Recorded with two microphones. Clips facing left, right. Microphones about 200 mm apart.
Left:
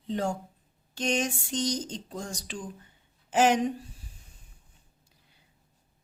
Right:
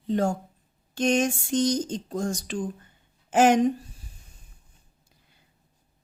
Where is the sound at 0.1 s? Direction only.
45° right (ahead or behind).